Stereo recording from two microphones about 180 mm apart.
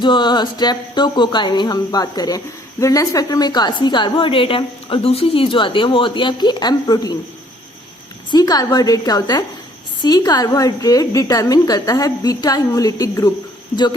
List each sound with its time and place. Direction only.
0.0 s a woman's voice: 25° left (ahead or behind)
8.3 s a woman's voice: 20° left (ahead or behind)